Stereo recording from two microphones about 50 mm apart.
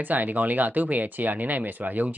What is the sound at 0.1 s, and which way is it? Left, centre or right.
Speech, right.